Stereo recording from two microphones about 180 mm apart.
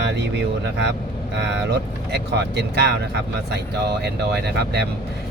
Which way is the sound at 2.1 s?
65° right (ahead or behind).